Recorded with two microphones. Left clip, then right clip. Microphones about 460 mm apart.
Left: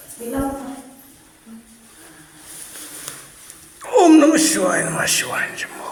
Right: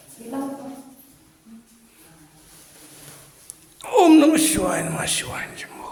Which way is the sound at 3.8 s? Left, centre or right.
Right.